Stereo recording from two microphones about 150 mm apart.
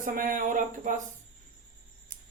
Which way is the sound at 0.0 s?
65° right (ahead or behind).